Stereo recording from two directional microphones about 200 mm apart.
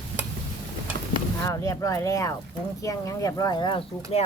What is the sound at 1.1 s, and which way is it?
Speech, 15° left (ahead or behind).